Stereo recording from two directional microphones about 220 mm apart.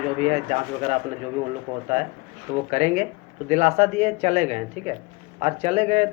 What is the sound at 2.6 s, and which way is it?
Speech, 30° right (ahead or behind).